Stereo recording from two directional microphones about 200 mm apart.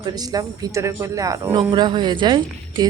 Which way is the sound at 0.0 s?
20° right (ahead or behind).